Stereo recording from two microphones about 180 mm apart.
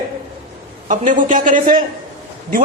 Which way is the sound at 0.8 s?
45° right (ahead or behind).